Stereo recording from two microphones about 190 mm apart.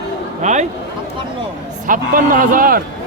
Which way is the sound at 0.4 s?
40° right (ahead or behind).